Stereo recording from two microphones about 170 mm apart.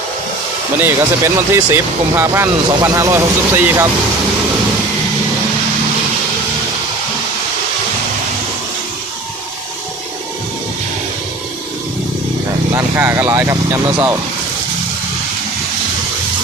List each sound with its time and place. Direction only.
0.8 s speech: 15° right (ahead or behind)
12.7 s speech: 15° right (ahead or behind)